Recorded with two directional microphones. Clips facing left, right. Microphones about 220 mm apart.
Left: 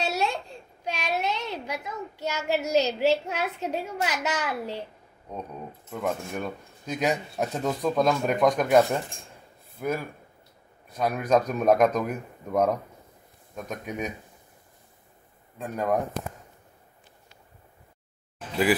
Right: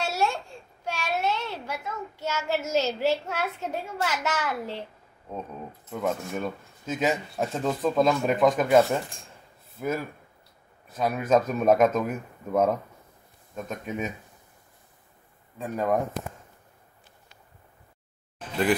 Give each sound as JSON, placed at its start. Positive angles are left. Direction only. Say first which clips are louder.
{"t": 0.0, "sound": "a child's voice", "louder": "even", "side_deg": 20}
{"t": 5.3, "sound": "speech", "louder": "even", "side_deg": -5}
{"t": 15.5, "sound": "speech", "louder": "right 1 dB", "side_deg": 0}